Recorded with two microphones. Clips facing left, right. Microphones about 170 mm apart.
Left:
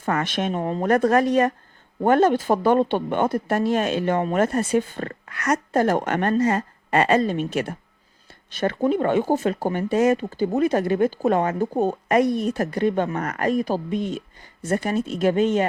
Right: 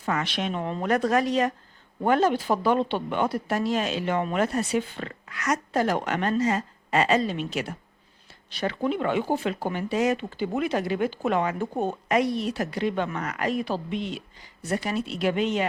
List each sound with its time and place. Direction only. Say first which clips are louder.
0.0 s speech: left 4 dB; 50° left (ahead or behind)
12.0 s speech: left 3 dB; 50° left (ahead or behind)